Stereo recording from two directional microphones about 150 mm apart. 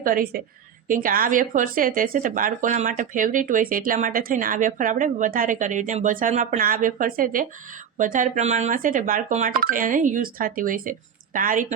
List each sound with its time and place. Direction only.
0.0 s a woman's voice: 70° right (ahead or behind)